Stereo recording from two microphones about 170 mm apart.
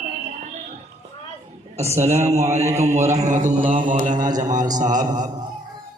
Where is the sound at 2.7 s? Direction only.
15° right (ahead or behind).